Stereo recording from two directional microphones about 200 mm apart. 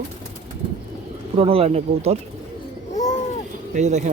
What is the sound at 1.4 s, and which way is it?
Speech, 30° right (ahead or behind).